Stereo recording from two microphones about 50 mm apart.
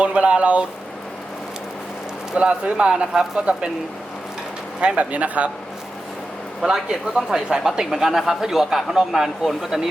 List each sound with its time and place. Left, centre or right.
0.0 s a sound: right
2.3 s speech: centre
4.8 s speech: right
6.7 s a man's voice: centre